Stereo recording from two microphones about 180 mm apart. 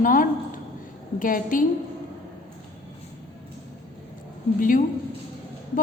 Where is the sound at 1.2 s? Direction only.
50° left (ahead or behind).